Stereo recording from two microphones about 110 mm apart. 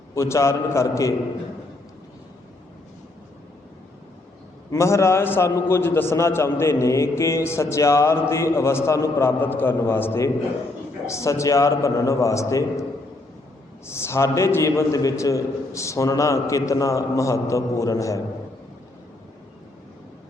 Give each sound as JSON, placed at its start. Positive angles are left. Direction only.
{"t": 0.1, "sound": "a man's voice", "side_deg": 25}
{"t": 4.7, "sound": "a man's voice", "side_deg": 25}
{"t": 13.8, "sound": "a man's voice", "side_deg": 25}